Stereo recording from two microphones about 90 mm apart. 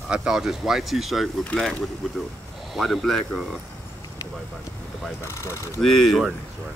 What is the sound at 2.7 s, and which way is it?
Speech, centre (ahead or behind).